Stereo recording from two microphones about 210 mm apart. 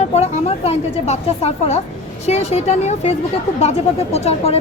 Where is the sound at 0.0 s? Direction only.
30° left (ahead or behind).